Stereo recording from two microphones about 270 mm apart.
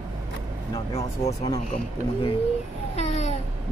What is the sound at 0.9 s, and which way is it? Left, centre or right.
Speech, left.